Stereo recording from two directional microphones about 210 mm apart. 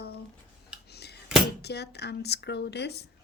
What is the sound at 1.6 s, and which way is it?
A woman's voice, 50° left (ahead or behind).